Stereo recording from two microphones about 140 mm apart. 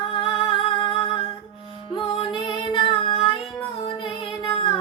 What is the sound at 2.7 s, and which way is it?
Child singing, 35° left (ahead or behind).